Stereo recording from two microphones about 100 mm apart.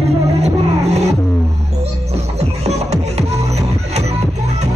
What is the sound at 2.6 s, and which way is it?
Music, 90° right.